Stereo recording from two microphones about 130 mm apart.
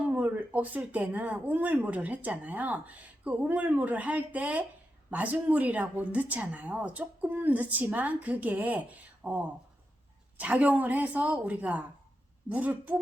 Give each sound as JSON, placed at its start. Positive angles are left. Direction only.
{"t": 0.1, "sound": "speech", "side_deg": -15}